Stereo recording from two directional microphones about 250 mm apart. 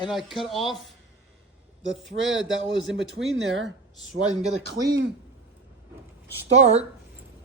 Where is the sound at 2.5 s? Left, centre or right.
Right.